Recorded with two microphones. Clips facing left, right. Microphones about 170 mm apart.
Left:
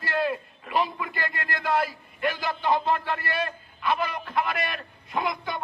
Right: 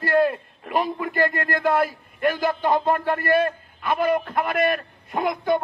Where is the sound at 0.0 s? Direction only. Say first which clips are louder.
Right 7 dB; 50° right (ahead or behind).